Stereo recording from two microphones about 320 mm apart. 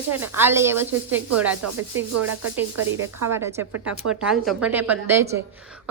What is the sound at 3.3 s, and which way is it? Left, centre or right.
A woman's voice, centre.